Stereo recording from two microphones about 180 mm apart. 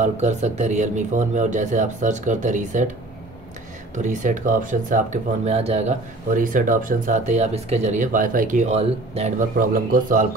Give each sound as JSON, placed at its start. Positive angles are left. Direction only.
{"t": 0.0, "sound": "speech", "side_deg": -40}
{"t": 3.9, "sound": "speech", "side_deg": -45}